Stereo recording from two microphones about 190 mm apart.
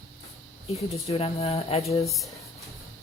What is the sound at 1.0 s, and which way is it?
Speech, 30° left (ahead or behind).